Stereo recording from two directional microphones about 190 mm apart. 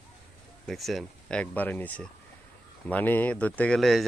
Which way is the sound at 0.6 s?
Centre (ahead or behind).